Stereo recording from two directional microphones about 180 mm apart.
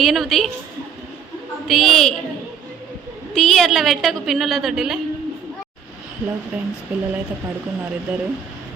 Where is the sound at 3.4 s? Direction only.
Centre (ahead or behind).